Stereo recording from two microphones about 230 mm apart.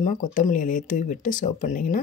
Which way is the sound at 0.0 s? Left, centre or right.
Left.